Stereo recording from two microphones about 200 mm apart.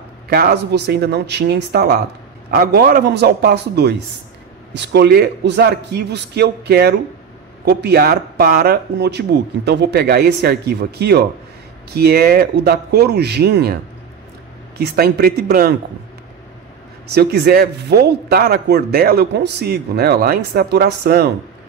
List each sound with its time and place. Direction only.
0.3 s speech: 50° right (ahead or behind)
14.8 s speech: 50° right (ahead or behind)
17.1 s speech: 55° right (ahead or behind)